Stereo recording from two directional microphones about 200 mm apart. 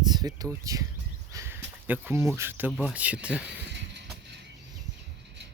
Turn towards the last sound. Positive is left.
turn(degrees=-5)  # may be behind; listen again after turning